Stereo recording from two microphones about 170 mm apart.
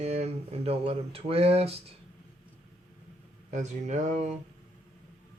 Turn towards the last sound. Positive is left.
turn(degrees=-45)  # may be behind; listen again after turning